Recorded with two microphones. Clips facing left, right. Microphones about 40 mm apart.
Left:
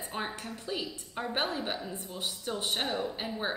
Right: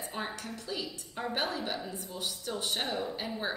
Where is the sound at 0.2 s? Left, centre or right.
Left.